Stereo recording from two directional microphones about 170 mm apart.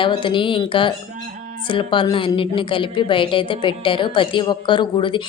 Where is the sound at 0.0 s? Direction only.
30° left (ahead or behind).